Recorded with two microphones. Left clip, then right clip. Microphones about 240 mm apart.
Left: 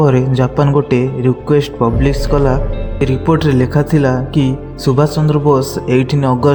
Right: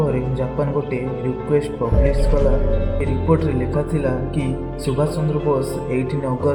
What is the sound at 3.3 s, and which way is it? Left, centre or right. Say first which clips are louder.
Speech: left 4 dB; left.